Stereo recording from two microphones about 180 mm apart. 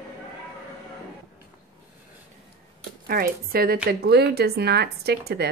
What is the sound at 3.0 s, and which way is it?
A woman's voice, 55° right (ahead or behind).